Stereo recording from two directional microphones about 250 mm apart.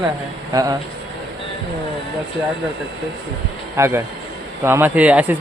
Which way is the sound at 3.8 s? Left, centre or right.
Centre.